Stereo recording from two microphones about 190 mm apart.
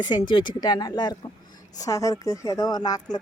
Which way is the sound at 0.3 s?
25° left (ahead or behind).